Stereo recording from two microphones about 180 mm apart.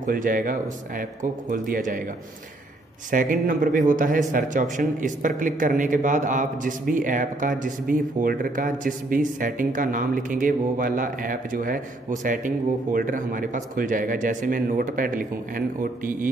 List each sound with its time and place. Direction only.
0.0 s a man's voice: 50° right (ahead or behind)
3.1 s a man's voice: 50° right (ahead or behind)